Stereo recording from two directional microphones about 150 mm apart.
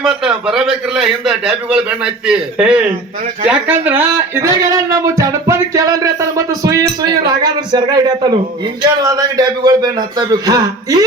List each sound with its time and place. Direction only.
0.0 s a man's voice: 5° right (ahead or behind); by 11.0 s 25° right (ahead or behind)